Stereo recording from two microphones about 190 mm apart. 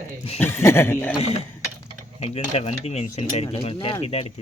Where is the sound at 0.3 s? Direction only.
10° left (ahead or behind).